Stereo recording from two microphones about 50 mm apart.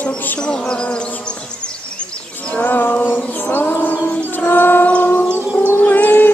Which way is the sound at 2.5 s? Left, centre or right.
Left.